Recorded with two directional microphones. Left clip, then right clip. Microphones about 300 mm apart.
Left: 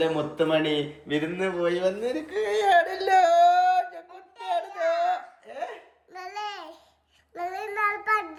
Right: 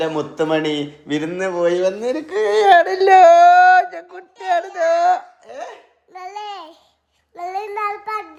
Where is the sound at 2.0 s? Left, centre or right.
Right.